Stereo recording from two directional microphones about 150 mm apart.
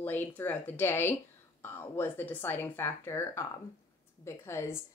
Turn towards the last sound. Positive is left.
turn(degrees=15)  # may be behind; listen again after turning